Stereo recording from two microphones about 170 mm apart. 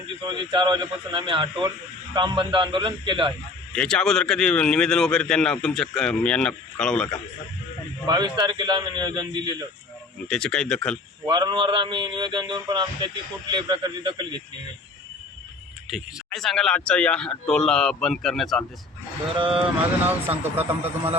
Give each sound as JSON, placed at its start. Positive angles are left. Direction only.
{"t": 0.2, "sound": "a man's voice", "side_deg": -25}
{"t": 3.7, "sound": "speech", "side_deg": 5}
{"t": 8.0, "sound": "a man's voice", "side_deg": -25}
{"t": 10.2, "sound": "speech", "side_deg": 5}
{"t": 11.3, "sound": "a man's voice", "side_deg": -25}
{"t": 15.9, "sound": "speech", "side_deg": 0}
{"t": 19.4, "sound": "speech", "side_deg": -30}
{"t": 20.3, "sound": "speech", "side_deg": -10}